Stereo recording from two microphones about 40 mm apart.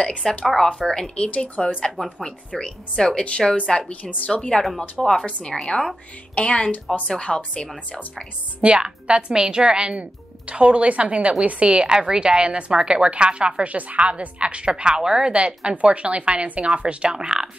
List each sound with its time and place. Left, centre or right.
0.0 s speech: left
0.8 s speech: centre
1.1 s speech: left
2.5 s speech: centre
3.6 s speech: centre
5.0 s speech: centre
5.5 s speech: centre
6.3 s speech: left
8.5 s a woman's voice: right